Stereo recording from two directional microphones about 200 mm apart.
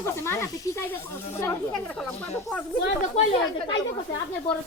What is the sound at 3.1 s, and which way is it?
Speech, 30° left (ahead or behind).